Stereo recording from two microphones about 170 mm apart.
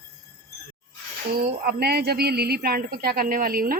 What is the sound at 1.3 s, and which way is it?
A woman's voice, 65° right (ahead or behind).